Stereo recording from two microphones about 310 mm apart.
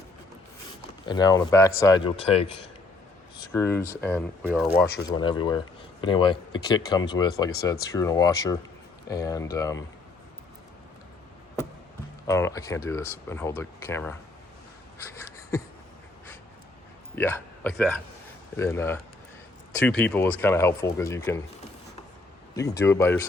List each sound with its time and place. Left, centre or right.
1.0 s speech: centre
5.1 s speech: centre
12.3 s speech: centre
14.9 s a sound: centre
17.2 s speech: centre
22.5 s speech: centre